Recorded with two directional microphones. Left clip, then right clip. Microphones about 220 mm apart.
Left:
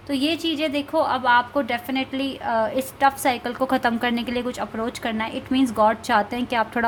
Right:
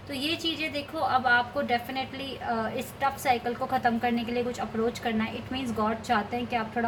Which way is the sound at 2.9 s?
50° left (ahead or behind).